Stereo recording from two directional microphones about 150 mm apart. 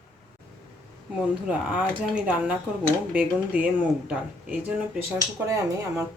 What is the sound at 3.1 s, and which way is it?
Speech, 5° right (ahead or behind).